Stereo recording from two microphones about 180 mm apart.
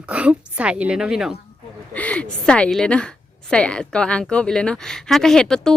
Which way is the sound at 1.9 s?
10° left (ahead or behind).